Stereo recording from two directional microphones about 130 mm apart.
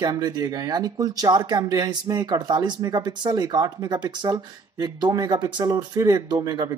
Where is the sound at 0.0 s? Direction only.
35° right (ahead or behind).